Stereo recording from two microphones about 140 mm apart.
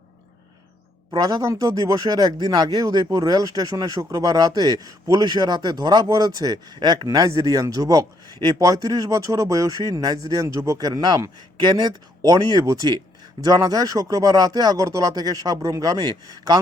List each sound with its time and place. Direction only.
1.1 s speech: 25° right (ahead or behind)